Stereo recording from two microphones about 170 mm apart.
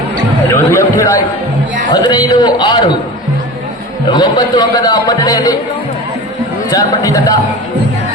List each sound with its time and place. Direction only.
0.5 s a sound: 15° left (ahead or behind)
1.9 s speech: 25° left (ahead or behind)
4.1 s speech: 25° left (ahead or behind)
6.7 s speech: 20° left (ahead or behind)